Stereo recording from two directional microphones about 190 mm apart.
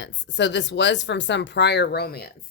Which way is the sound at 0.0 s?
70° left (ahead or behind).